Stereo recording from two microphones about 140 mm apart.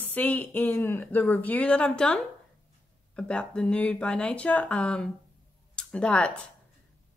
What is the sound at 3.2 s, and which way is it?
A woman's voice, 5° left (ahead or behind).